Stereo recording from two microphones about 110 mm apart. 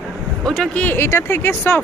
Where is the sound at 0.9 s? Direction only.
25° left (ahead or behind).